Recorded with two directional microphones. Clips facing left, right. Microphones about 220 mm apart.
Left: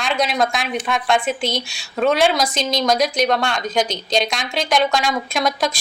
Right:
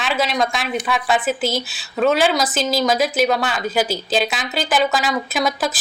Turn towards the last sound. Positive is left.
turn(degrees=-5)  # may be behind; listen again after turning